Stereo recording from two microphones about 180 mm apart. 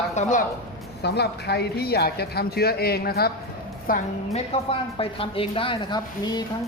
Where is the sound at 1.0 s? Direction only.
65° left (ahead or behind).